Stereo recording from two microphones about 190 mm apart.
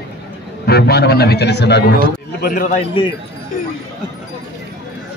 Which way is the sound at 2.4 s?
45° left (ahead or behind).